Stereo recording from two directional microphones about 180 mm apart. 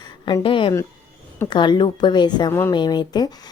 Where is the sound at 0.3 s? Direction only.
25° left (ahead or behind).